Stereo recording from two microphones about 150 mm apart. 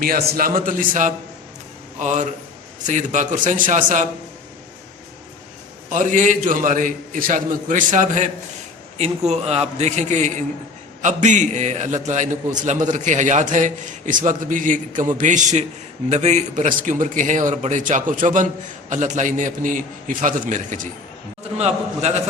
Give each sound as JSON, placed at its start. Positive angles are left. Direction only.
{"t": 0.0, "sound": "a man's voice", "side_deg": -80}
{"t": 5.9, "sound": "a man's voice", "side_deg": -55}
{"t": 21.6, "sound": "a man's voice", "side_deg": -45}